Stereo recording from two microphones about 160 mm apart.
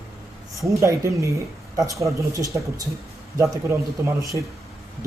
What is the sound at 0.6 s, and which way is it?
A man's voice, 20° right (ahead or behind).